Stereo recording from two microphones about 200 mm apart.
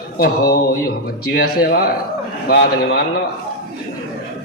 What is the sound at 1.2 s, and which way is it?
A man's voice, 50° left (ahead or behind).